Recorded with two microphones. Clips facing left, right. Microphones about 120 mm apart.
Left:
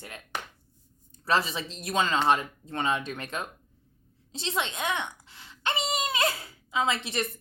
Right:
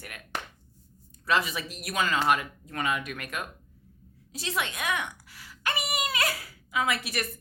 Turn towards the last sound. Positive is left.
turn(degrees=25)  # may be behind; listen again after turning